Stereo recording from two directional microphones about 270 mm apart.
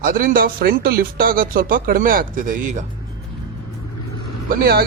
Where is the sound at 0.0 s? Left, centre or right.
Right.